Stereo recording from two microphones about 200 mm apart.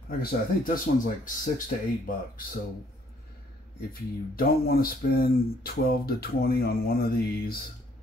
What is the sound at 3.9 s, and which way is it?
Speech, 45° left (ahead or behind).